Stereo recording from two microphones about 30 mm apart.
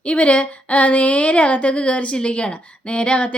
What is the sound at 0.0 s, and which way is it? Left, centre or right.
A woman's voice, left.